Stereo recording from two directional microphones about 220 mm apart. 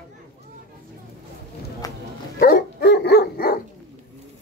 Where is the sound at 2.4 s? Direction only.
45° left (ahead or behind).